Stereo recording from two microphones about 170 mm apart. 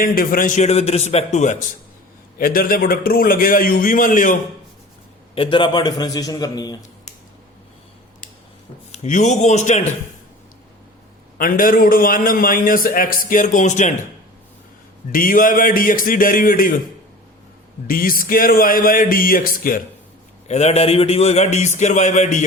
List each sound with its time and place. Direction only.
0.0 s a man's voice: 60° left (ahead or behind)
2.4 s a man's voice: 60° left (ahead or behind)
5.3 s a man's voice: 30° left (ahead or behind)
8.9 s a man's voice: 45° left (ahead or behind)
11.3 s a man's voice: 55° left (ahead or behind)
15.1 s a man's voice: 55° left (ahead or behind)
17.8 s a man's voice: 55° left (ahead or behind)
20.5 s a man's voice: 40° left (ahead or behind)